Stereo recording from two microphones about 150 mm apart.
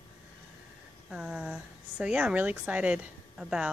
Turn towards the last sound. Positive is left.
turn(degrees=-5)  # may be behind; listen again after turning